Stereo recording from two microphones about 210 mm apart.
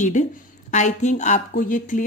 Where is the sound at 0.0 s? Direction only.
35° left (ahead or behind).